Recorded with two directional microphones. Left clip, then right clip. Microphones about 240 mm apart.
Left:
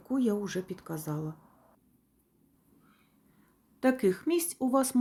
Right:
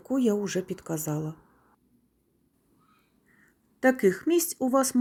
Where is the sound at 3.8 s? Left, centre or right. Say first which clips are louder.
Right 4 dB; centre.